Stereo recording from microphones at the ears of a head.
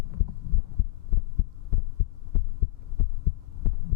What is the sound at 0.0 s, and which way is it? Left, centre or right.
Heart sounds, left.